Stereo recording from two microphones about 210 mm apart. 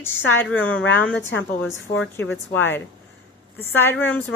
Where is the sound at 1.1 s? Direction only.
60° left (ahead or behind).